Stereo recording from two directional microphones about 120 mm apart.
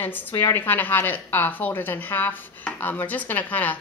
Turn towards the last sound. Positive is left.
turn(degrees=15)  # may be behind; listen again after turning